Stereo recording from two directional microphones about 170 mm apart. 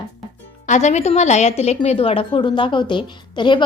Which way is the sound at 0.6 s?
45° left (ahead or behind).